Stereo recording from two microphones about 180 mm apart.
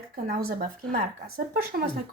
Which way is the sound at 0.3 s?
55° right (ahead or behind).